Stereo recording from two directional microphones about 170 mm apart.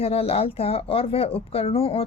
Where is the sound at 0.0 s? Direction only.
35° left (ahead or behind).